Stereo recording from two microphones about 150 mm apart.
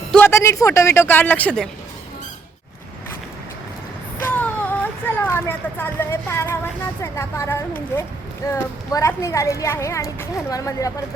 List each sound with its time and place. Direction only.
0.1 s a man's voice: 15° left (ahead or behind)
4.2 s a child's voice: 10° left (ahead or behind)